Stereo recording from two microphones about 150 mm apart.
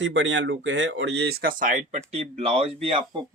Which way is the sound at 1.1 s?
90° right.